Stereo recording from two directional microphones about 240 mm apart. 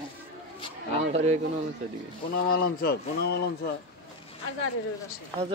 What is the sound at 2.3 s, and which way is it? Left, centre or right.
A man's voice, left.